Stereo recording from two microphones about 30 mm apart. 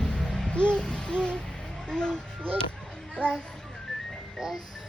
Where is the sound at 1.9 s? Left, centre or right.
Left.